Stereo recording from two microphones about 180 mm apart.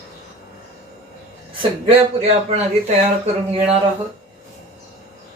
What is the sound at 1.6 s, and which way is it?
Speech, 35° right (ahead or behind).